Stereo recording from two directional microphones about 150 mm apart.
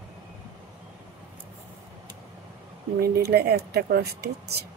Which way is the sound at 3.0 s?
90° right.